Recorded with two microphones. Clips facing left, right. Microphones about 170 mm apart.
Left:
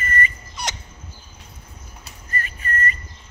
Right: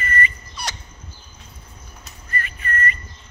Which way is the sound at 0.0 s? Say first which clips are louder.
Right 1 dB; 40° left (ahead or behind).